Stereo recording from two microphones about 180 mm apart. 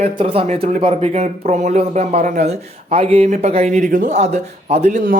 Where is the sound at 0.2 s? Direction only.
35° right (ahead or behind).